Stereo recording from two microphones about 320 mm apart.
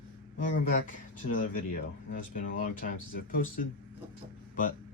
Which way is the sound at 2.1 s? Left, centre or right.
Left.